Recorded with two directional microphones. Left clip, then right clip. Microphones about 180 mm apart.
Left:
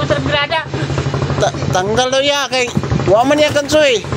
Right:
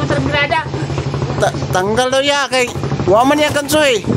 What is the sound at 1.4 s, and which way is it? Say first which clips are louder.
Speech: right 1 dB; 20° right (ahead or behind).